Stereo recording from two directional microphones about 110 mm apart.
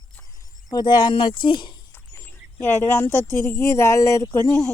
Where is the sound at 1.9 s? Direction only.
20° left (ahead or behind).